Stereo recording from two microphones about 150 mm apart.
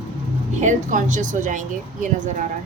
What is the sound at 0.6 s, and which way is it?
A woman's voice, 55° right (ahead or behind).